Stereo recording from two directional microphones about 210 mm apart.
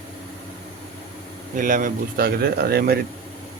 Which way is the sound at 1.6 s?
40° right (ahead or behind).